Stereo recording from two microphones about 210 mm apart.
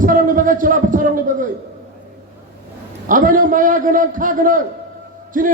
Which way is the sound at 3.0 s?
40° right (ahead or behind).